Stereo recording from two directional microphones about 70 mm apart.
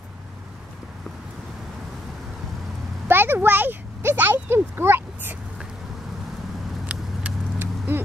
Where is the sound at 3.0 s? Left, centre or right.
Right.